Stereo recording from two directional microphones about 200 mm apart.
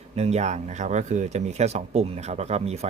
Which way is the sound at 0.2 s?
35° right (ahead or behind).